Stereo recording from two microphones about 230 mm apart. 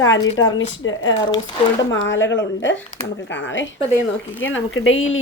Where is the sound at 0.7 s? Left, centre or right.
Left.